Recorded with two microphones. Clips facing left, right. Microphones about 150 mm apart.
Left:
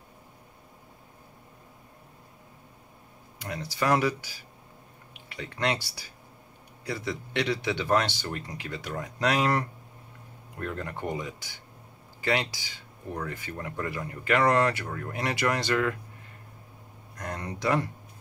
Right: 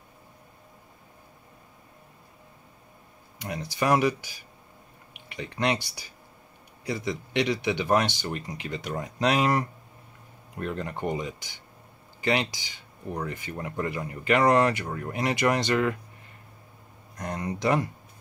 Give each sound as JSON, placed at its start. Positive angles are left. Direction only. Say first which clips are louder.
{"t": 3.3, "sound": "a man's voice", "louder": "right 2 dB", "side_deg": -20}
{"t": 17.2, "sound": "speech", "louder": "right 3 dB", "side_deg": -20}